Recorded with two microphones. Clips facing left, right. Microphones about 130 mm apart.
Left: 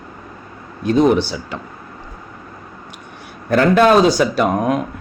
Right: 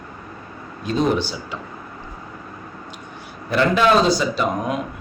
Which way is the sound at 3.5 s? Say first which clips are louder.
Left 5 dB; 45° left (ahead or behind).